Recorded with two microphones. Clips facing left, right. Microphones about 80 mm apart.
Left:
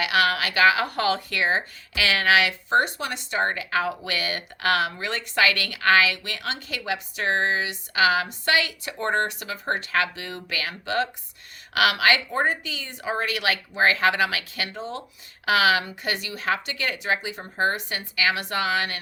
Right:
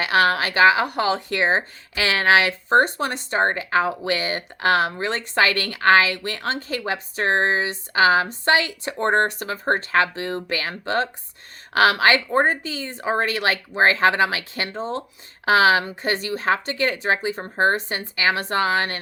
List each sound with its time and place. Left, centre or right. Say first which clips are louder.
0.0 s speech: right 3 dB; right